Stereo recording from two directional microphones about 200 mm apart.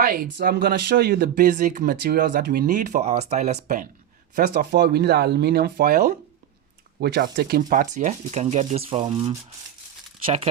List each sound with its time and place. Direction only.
0.0 s speech: 50° right (ahead or behind)
4.4 s speech: 50° right (ahead or behind); by 10.5 s 30° right (ahead or behind)